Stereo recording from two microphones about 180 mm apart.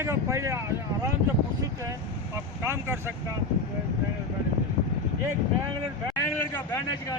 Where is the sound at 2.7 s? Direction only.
15° right (ahead or behind).